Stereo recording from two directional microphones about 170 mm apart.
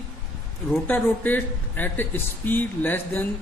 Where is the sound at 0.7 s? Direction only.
10° left (ahead or behind).